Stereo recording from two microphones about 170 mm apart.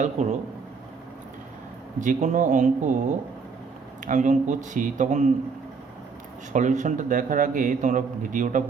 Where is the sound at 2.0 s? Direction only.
45° right (ahead or behind).